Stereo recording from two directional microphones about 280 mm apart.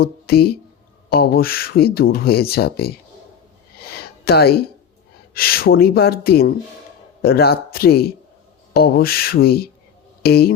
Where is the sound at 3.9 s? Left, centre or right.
Left.